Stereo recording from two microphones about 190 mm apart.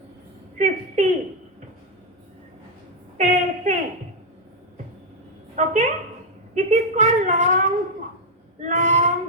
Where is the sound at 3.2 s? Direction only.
40° right (ahead or behind).